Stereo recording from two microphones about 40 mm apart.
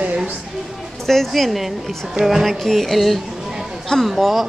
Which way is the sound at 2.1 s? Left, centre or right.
Centre.